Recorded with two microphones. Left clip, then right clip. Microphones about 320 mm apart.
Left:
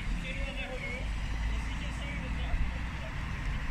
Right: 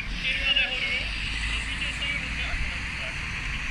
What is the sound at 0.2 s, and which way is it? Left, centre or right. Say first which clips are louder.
Vehicle: right 17 dB; centre.